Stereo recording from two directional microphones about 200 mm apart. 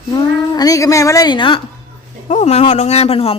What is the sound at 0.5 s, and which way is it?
A woman's voice, 20° left (ahead or behind).